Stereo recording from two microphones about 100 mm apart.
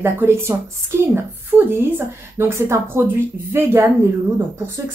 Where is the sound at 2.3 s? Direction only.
25° right (ahead or behind).